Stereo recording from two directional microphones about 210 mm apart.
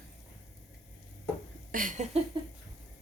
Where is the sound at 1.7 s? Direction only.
40° right (ahead or behind).